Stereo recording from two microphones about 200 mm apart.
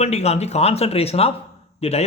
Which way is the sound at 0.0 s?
30° left (ahead or behind).